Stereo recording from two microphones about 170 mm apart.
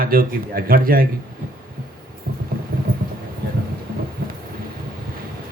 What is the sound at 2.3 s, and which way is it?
Music, 60° right (ahead or behind).